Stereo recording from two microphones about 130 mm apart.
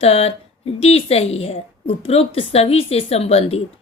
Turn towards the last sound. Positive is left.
turn(degrees=50)  # may be behind; listen again after turning